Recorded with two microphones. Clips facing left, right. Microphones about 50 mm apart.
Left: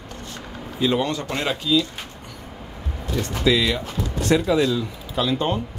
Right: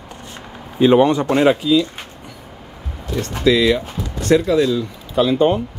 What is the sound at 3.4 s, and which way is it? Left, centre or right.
Speech, centre.